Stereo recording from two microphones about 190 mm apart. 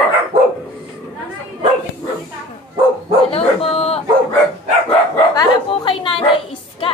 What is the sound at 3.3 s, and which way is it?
Bow-wow, 30° left (ahead or behind).